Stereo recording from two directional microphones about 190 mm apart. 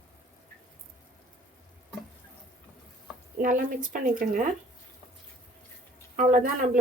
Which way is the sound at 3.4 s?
45° right (ahead or behind).